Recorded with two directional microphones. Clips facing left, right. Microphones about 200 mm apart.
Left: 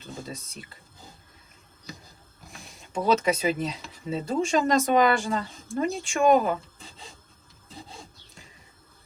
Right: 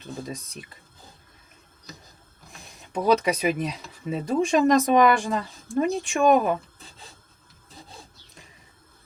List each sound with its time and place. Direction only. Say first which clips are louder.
0.3 s speech: right 3 dB; 15° right (ahead or behind)
2.9 s speech: right 2 dB; 15° right (ahead or behind)